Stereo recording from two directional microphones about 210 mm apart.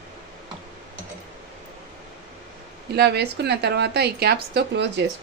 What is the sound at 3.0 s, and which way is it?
A woman's voice, 50° right (ahead or behind).